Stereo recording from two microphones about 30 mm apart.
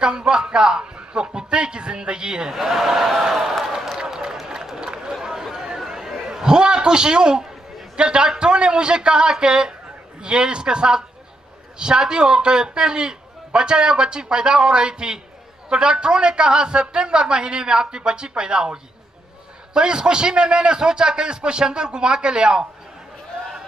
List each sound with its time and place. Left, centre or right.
0.3 s a man's voice: right
2.5 s a sound: centre
4.1 s run: centre
5.1 s chatter: centre
6.4 s a man's voice: right